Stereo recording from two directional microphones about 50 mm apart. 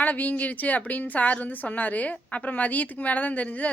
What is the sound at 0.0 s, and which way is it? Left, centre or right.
Speech, left.